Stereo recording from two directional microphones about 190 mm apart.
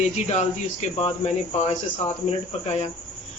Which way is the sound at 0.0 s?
35° left (ahead or behind).